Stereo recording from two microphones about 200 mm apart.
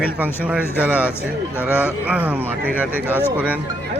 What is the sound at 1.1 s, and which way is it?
Speech, 10° left (ahead or behind).